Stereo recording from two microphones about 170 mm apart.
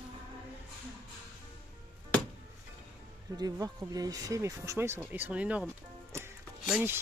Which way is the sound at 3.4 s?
20° right (ahead or behind).